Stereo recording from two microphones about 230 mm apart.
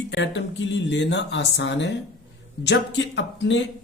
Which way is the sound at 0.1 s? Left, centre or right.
Left.